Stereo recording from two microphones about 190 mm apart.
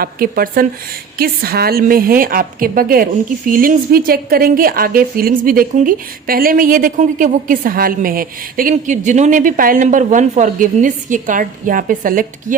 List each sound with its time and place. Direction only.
0.0 s a woman's voice: 50° right (ahead or behind)